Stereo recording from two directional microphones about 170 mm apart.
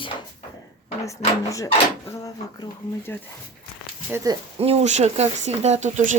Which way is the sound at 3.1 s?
10° left (ahead or behind).